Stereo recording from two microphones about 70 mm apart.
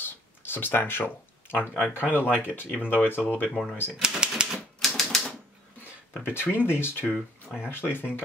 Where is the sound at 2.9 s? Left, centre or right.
Left.